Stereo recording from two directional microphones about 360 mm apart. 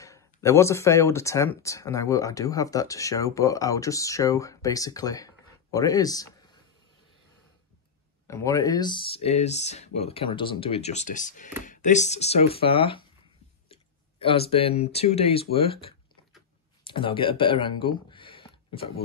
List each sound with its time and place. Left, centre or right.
0.0 s speech: centre
8.3 s speech: centre
14.2 s speech: centre